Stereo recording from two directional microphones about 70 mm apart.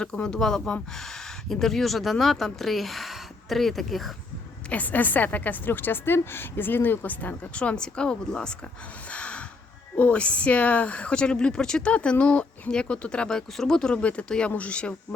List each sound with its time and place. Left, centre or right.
0.0 s speech: centre
4.7 s a woman's voice: left
9.0 s gasp: centre
10.0 s speech: centre